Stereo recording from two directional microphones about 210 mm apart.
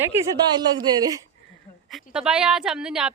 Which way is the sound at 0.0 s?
10° right (ahead or behind).